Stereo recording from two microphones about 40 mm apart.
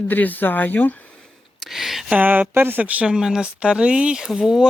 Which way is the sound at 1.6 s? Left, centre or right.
Centre.